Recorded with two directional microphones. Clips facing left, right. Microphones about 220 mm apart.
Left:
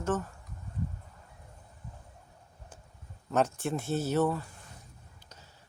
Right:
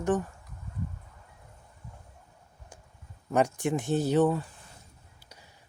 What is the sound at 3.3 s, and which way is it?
Speech, 15° right (ahead or behind).